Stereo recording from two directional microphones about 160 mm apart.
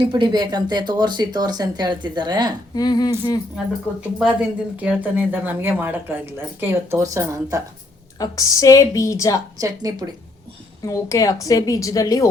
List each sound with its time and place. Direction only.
0.1 s speech: 30° right (ahead or behind)
2.7 s a woman's voice: 25° left (ahead or behind)
4.2 s speech: 5° right (ahead or behind)
8.2 s a woman's voice: 20° left (ahead or behind)
9.6 s speech: 25° right (ahead or behind)
10.8 s a woman's voice: 20° left (ahead or behind)